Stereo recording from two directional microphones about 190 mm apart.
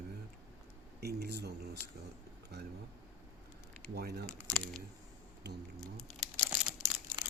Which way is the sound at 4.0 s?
55° right (ahead or behind).